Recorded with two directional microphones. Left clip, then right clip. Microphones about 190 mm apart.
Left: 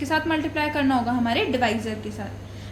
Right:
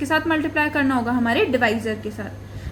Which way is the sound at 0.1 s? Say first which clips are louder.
Right 3 dB; 40° right (ahead or behind).